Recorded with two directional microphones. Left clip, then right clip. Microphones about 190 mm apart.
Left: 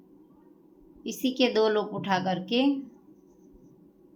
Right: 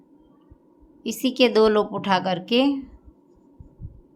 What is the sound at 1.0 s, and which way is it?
A woman's voice, 25° right (ahead or behind).